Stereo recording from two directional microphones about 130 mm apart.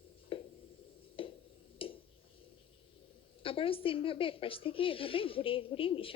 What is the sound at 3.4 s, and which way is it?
A woman's voice, 45° left (ahead or behind).